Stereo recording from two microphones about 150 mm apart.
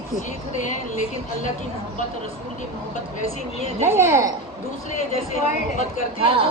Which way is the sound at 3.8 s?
15° right (ahead or behind).